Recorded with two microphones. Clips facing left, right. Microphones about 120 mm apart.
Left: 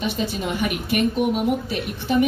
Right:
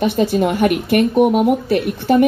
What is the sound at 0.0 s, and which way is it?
A woman's voice, 45° right (ahead or behind).